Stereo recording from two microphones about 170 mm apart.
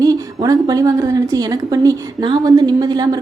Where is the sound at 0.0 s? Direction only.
25° right (ahead or behind).